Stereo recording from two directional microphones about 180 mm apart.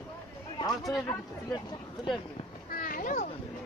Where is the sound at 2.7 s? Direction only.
50° left (ahead or behind).